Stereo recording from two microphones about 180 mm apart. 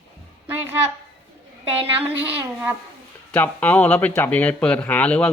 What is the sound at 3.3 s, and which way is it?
Speech, 10° left (ahead or behind).